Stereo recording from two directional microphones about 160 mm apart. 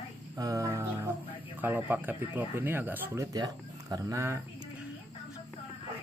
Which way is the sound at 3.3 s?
25° right (ahead or behind).